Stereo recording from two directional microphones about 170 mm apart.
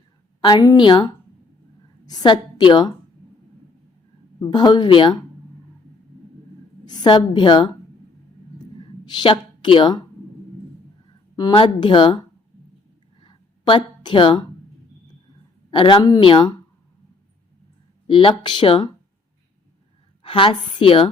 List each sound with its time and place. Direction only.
0.4 s a woman's voice: 25° left (ahead or behind)
4.4 s a woman's voice: 25° left (ahead or behind)
6.8 s a woman's voice: 25° left (ahead or behind)
8.8 s speech: 30° left (ahead or behind)
11.3 s a woman's voice: 25° left (ahead or behind)
13.1 s a sound: 30° left (ahead or behind)
15.7 s a woman's voice: 30° left (ahead or behind)
18.1 s a woman's voice: 30° left (ahead or behind)
20.2 s a woman's voice: 30° left (ahead or behind)